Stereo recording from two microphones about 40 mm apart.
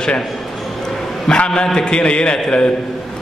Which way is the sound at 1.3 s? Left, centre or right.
Left.